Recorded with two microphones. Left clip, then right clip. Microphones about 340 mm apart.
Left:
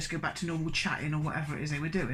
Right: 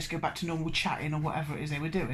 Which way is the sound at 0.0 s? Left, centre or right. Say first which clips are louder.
Right 1 dB; centre.